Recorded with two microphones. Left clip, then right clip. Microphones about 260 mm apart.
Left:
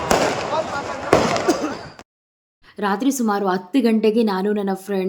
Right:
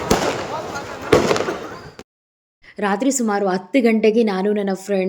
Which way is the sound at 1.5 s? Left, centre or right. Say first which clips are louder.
Left 6 dB; left.